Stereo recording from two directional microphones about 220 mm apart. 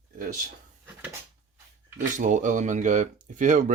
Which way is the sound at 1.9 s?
35° right (ahead or behind).